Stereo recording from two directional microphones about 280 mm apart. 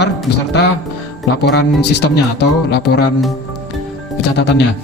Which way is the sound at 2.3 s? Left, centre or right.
Left.